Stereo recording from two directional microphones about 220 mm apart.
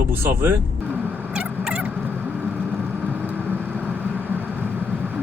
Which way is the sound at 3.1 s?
10° right (ahead or behind).